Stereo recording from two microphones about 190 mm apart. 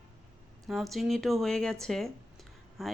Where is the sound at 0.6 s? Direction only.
Centre (ahead or behind).